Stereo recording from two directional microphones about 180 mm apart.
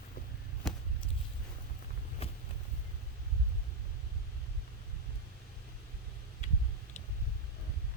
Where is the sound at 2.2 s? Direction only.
35° left (ahead or behind).